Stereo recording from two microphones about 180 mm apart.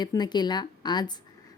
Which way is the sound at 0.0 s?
25° left (ahead or behind).